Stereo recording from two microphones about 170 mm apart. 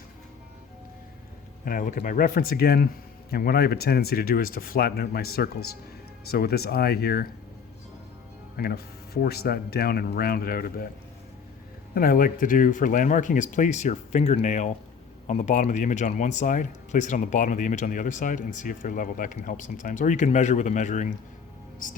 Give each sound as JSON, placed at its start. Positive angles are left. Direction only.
{"t": 1.6, "sound": "speech", "side_deg": 55}
{"t": 8.5, "sound": "speech", "side_deg": 65}
{"t": 11.9, "sound": "speech", "side_deg": 55}